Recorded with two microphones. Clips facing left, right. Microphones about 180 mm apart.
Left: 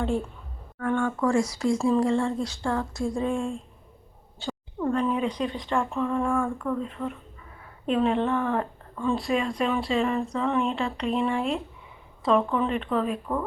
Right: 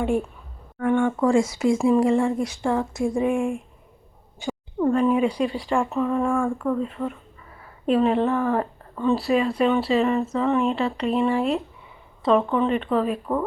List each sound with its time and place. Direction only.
0.0 s a woman's voice: 15° right (ahead or behind)